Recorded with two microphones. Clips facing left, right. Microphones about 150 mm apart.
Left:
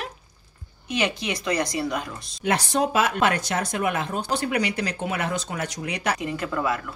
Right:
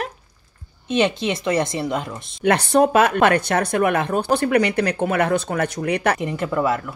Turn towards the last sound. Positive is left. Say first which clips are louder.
# right 4 dB
turn(degrees=-25)  # may be behind; listen again after turning